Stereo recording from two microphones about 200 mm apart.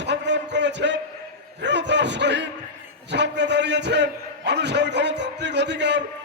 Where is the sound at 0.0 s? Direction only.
60° right (ahead or behind).